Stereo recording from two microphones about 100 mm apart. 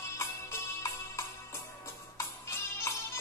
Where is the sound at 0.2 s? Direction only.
30° left (ahead or behind).